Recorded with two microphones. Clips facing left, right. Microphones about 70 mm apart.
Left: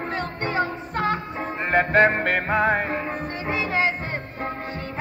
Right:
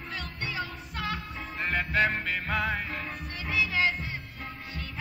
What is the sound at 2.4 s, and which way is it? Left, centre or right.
Music, left.